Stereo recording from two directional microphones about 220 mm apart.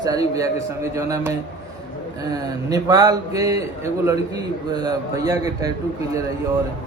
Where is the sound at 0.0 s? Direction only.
15° right (ahead or behind).